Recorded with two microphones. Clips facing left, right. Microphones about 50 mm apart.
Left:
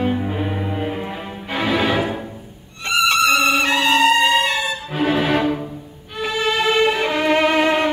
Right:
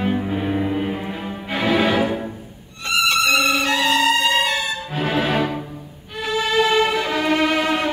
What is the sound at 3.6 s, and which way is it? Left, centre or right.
Music, left.